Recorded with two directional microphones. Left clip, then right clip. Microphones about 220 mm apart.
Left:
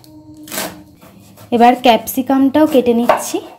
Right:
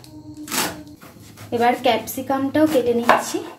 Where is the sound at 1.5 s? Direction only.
45° left (ahead or behind).